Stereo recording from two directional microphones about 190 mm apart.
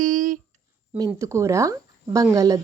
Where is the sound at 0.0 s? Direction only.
45° right (ahead or behind).